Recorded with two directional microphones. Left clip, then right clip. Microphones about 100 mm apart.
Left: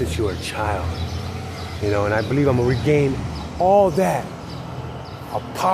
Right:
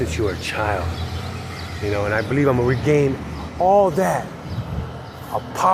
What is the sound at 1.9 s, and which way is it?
Speech, 40° left (ahead or behind).